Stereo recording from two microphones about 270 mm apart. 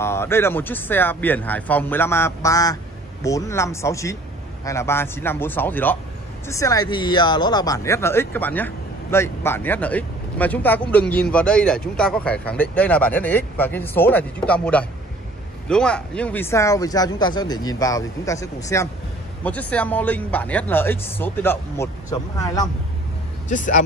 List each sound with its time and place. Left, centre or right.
0.0 s speech: centre
23.5 s speech: left